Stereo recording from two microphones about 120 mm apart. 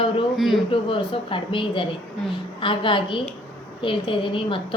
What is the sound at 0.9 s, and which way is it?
A woman's voice, 45° left (ahead or behind).